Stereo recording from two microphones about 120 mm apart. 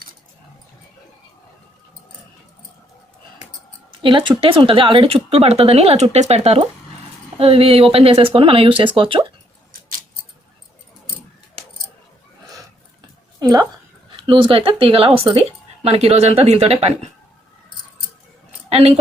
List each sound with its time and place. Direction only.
4.0 s speech: 40° right (ahead or behind)
13.4 s a sound: 35° right (ahead or behind)
14.2 s speech: 45° right (ahead or behind); by 17.1 s 60° right (ahead or behind)
18.7 s a woman's voice: 60° right (ahead or behind)